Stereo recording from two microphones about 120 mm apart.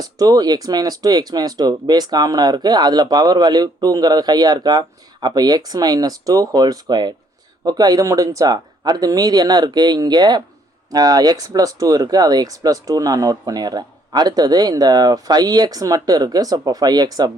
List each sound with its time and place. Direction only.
0.0 s speech: 30° right (ahead or behind)